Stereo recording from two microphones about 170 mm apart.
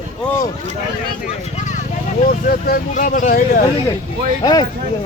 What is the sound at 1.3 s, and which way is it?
Speech, 45° left (ahead or behind).